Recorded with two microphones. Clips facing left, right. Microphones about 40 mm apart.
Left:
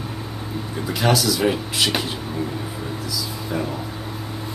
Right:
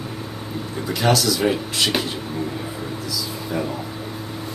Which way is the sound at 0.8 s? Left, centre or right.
Centre.